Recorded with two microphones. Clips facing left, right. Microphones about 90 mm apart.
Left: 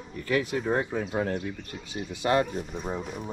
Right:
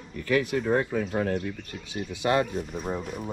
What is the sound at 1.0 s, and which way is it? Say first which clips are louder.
Speech: right 2 dB; 5° left (ahead or behind).